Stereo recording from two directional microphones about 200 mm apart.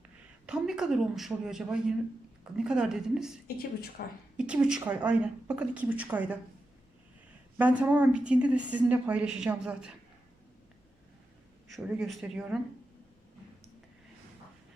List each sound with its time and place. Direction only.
0.4 s speech: 5° right (ahead or behind)
3.4 s speech: 50° left (ahead or behind)
4.4 s a woman's voice: 5° right (ahead or behind)
7.6 s a woman's voice: 10° right (ahead or behind)
11.7 s speech: centre (ahead or behind)